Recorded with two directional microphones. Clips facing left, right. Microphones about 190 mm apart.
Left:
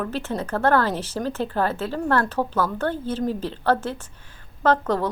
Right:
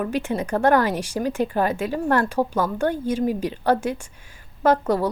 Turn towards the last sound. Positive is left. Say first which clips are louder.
# right 2 dB
turn(degrees=-10)  # may be behind; listen again after turning